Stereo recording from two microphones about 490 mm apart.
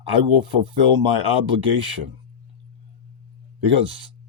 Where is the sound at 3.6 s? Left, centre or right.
Right.